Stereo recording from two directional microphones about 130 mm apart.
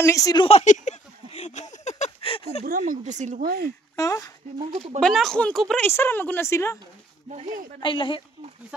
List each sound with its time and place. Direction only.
0.0 s speech: 25° left (ahead or behind)
0.5 s a sound: 60° left (ahead or behind)
2.2 s a sound: 45° left (ahead or behind)
2.7 s speech: 90° right
3.9 s speech: 25° left (ahead or behind)
5.0 s speech: 5° left (ahead or behind)
5.9 s speech: 15° left (ahead or behind)
7.8 s speech: 40° left (ahead or behind)